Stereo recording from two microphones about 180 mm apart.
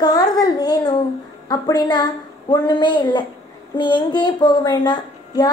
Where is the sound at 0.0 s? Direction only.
20° left (ahead or behind).